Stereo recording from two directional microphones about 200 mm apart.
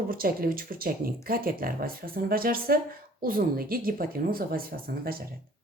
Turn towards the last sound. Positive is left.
turn(degrees=-45)  # may be behind; listen again after turning